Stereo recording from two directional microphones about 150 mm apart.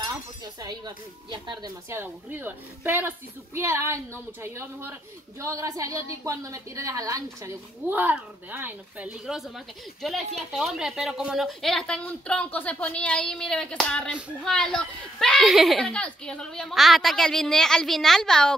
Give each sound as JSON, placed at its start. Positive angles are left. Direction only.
{"t": 0.6, "sound": "speech", "side_deg": -25}
{"t": 1.9, "sound": "a woman's voice", "side_deg": -15}
{"t": 10.5, "sound": "speech", "side_deg": 0}